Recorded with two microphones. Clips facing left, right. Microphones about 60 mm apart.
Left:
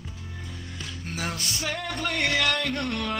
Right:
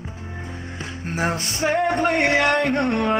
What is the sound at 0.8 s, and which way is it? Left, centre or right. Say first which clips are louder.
Music: right 9 dB; right.